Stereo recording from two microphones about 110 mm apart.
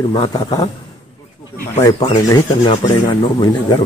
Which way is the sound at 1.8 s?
35° left (ahead or behind).